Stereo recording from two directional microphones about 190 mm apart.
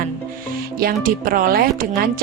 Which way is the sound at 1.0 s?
50° right (ahead or behind).